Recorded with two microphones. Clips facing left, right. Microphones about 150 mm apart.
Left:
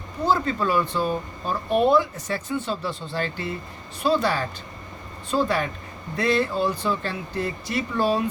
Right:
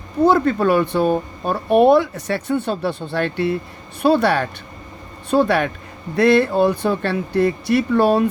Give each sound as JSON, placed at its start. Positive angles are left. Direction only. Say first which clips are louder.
{"t": 0.3, "sound": "speech", "louder": "right 7 dB", "side_deg": -65}